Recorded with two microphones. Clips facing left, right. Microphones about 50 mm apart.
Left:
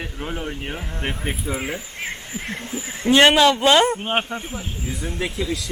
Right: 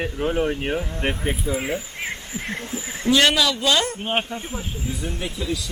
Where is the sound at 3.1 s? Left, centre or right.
Left.